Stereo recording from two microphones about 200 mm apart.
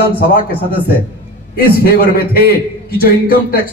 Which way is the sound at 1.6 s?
50° left (ahead or behind).